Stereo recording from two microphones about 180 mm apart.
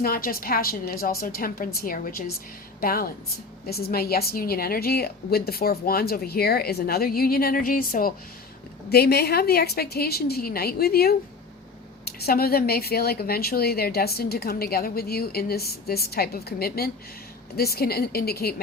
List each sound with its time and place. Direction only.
0.0 s a woman's voice: 55° left (ahead or behind)